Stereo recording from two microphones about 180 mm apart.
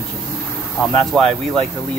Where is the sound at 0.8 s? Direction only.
Centre (ahead or behind).